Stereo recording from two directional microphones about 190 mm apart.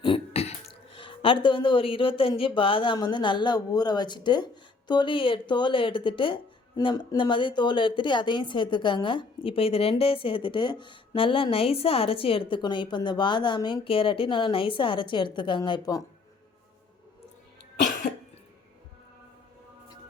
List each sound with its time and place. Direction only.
0.0 s throat clearing: 30° left (ahead or behind)
0.9 s speech: 25° left (ahead or behind)